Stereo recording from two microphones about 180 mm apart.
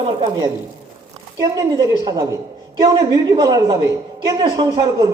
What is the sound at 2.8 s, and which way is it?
A man's voice, 20° right (ahead or behind).